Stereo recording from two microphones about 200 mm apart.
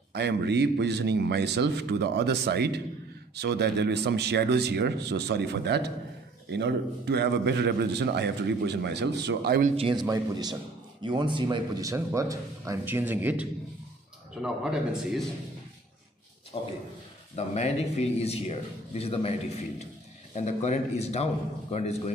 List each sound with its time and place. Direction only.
0.1 s a man's voice: 55° right (ahead or behind)
9.8 s a man's voice: 25° right (ahead or behind); by 15.2 s 5° right (ahead or behind)
16.5 s a man's voice: 30° left (ahead or behind)